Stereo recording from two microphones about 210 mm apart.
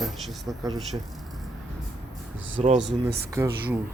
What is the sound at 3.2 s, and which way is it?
Speech, 15° right (ahead or behind).